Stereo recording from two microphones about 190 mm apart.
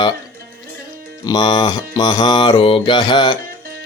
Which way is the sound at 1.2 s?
20° left (ahead or behind).